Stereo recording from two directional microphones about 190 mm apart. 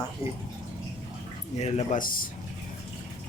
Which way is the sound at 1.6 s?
35° left (ahead or behind).